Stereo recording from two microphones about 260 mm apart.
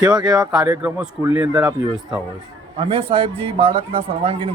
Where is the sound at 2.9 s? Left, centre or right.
Right.